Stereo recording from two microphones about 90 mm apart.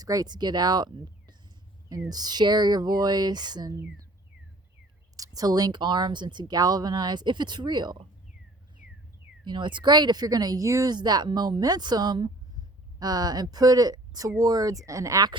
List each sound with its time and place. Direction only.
0.0 s speech: 45° right (ahead or behind)
5.1 s speech: 40° right (ahead or behind)
9.4 s speech: 60° right (ahead or behind); by 10.9 s 35° right (ahead or behind)
10.9 s speech: 50° right (ahead or behind)